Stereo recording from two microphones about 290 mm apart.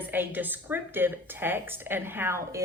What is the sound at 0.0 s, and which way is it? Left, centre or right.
A woman's voice, centre.